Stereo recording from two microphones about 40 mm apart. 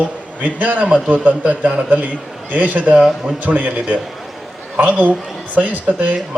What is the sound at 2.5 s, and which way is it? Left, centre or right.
Speech, right.